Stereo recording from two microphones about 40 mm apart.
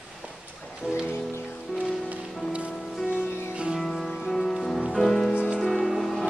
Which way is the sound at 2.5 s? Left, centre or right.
Right.